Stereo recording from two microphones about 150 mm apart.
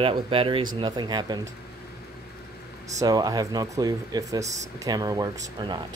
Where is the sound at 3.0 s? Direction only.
25° right (ahead or behind).